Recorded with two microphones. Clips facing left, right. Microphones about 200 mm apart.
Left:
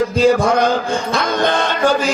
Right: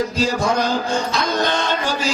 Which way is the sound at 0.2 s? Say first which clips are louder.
Left 8 dB; 55° left (ahead or behind).